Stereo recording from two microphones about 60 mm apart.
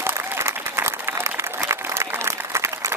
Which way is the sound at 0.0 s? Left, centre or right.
Right.